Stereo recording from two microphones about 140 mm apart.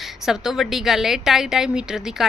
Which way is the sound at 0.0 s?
Centre (ahead or behind).